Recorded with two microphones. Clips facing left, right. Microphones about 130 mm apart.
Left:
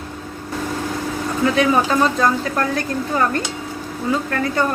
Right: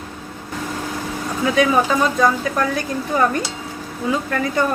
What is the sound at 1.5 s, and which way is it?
Speech, 5° right (ahead or behind).